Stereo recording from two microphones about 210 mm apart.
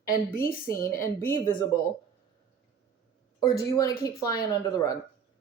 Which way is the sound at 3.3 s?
15° left (ahead or behind).